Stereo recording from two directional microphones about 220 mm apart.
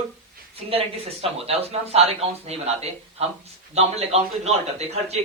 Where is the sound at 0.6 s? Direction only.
25° right (ahead or behind).